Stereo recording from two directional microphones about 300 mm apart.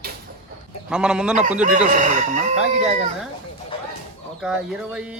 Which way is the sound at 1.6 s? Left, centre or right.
Right.